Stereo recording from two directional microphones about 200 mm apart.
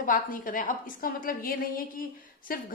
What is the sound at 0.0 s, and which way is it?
A woman's voice, 45° left (ahead or behind).